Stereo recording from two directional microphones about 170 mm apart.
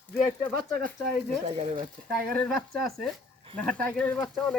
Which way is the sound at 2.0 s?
5° left (ahead or behind).